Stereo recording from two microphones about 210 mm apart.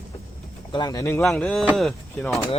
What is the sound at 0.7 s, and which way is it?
Speech, 20° left (ahead or behind).